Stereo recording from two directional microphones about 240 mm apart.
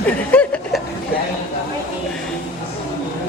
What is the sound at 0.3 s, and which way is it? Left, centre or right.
Chuckle, centre.